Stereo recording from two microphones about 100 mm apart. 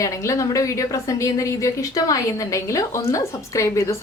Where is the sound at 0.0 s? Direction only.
30° left (ahead or behind).